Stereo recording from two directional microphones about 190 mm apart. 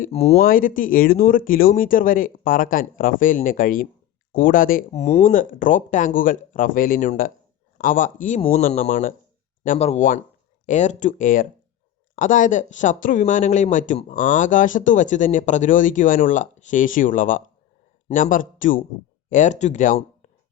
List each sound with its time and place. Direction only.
0.0 s speech: 30° left (ahead or behind)
0.3 s speech: 50° left (ahead or behind)
4.9 s speech: 35° left (ahead or behind)